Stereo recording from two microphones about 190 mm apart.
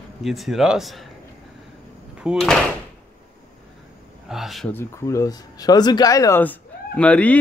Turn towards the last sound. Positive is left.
turn(degrees=5)  # may be behind; listen again after turning